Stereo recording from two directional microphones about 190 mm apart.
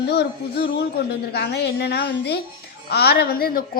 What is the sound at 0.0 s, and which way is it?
A woman's voice, 60° left (ahead or behind).